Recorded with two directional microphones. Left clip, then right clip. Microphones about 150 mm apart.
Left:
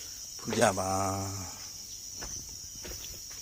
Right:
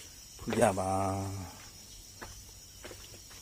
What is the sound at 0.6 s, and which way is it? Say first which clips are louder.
Speech: left 2 dB; centre (ahead or behind).